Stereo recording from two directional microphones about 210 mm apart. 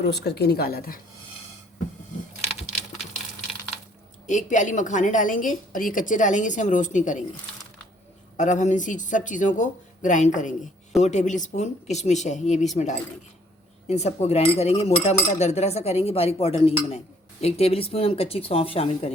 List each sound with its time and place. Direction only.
0.0 s a woman's voice: 50° left (ahead or behind)
4.3 s a woman's voice: 35° left (ahead or behind)
8.4 s a woman's voice: 35° left (ahead or behind)